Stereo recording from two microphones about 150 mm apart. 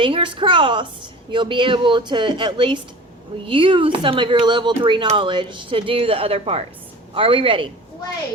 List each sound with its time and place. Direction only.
0.0 s speech: 35° right (ahead or behind)